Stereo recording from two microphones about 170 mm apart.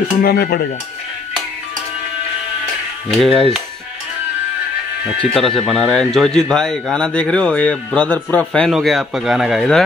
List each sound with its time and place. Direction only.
0.2 s speech: 65° left (ahead or behind)
3.1 s speech: centre (ahead or behind)
5.2 s speech: centre (ahead or behind)